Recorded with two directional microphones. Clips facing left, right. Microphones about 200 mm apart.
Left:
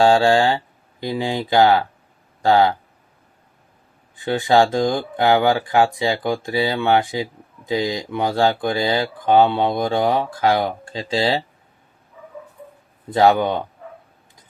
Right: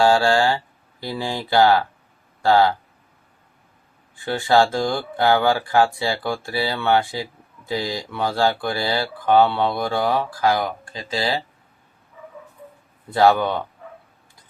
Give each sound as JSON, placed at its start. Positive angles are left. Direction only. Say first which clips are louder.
{"t": 0.0, "sound": "speech", "louder": "left 2 dB", "side_deg": 20}
{"t": 4.1, "sound": "speech", "louder": "left 2 dB", "side_deg": 20}
{"t": 13.1, "sound": "speech", "louder": "left 1 dB", "side_deg": 20}